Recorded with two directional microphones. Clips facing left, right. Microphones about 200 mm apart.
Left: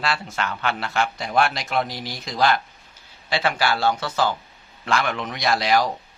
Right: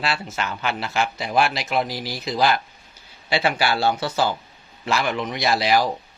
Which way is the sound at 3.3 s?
25° right (ahead or behind).